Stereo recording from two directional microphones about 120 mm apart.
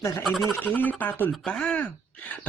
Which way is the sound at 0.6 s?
15° left (ahead or behind).